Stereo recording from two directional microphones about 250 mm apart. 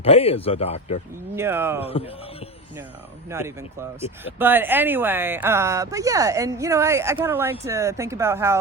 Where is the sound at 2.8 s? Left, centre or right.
Centre.